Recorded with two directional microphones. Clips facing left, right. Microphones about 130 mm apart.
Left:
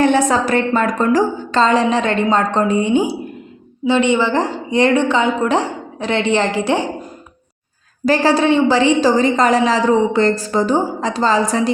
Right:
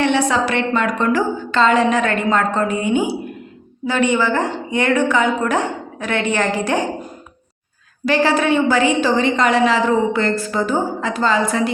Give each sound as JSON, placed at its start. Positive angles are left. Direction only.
{"t": 0.0, "sound": "a woman's voice", "side_deg": 45}
{"t": 8.0, "sound": "a woman's voice", "side_deg": 40}